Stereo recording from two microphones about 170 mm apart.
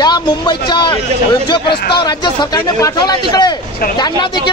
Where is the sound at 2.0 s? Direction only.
25° left (ahead or behind).